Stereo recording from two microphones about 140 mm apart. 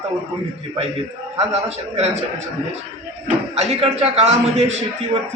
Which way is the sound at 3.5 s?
50° right (ahead or behind).